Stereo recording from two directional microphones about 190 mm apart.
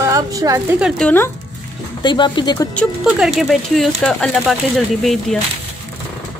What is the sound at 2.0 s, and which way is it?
Speech, 25° left (ahead or behind).